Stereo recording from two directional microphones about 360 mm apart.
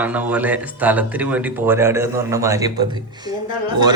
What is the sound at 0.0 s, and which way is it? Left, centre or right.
A man's voice, centre.